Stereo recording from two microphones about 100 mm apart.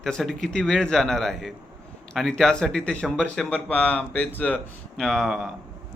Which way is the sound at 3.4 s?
20° left (ahead or behind).